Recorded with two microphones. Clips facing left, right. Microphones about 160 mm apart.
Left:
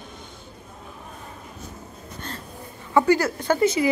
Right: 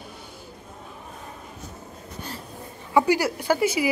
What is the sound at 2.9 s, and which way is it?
A woman's voice, 10° right (ahead or behind).